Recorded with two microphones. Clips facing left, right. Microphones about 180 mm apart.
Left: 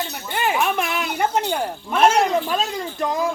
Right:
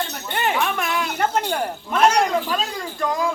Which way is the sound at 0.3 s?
5° left (ahead or behind).